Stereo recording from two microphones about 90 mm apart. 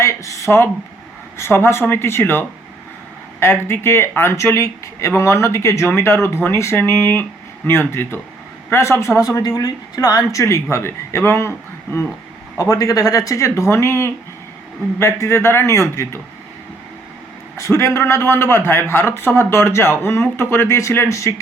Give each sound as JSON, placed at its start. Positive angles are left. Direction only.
{"t": 0.0, "sound": "a sound", "side_deg": 30}
{"t": 1.4, "sound": "a man's voice", "side_deg": 30}
{"t": 12.5, "sound": "a man's voice", "side_deg": 40}
{"t": 17.6, "sound": "a man's voice", "side_deg": 35}